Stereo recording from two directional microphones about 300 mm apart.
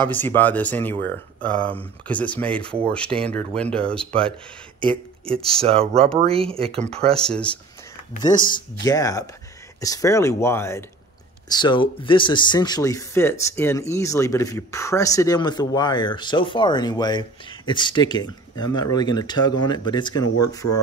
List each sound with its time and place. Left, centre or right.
0.1 s speech: centre
5.2 s speech: centre
5.6 s speech: centre
7.2 s speech: centre
8.2 s speech: centre
20.6 s speech: left